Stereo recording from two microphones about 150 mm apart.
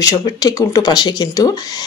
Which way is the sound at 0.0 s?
25° left (ahead or behind).